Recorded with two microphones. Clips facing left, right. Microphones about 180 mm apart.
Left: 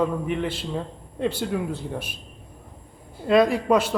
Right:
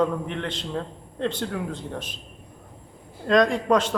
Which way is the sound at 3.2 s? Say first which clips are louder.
Left 1 dB; 5° left (ahead or behind).